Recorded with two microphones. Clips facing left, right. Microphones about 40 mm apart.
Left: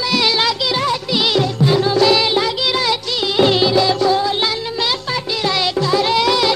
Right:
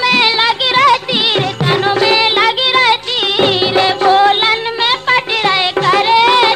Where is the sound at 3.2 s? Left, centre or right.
Right.